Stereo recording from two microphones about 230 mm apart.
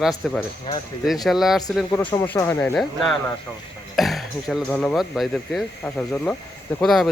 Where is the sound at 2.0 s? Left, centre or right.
Centre.